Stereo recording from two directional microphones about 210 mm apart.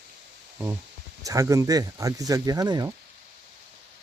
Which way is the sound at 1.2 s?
15° right (ahead or behind).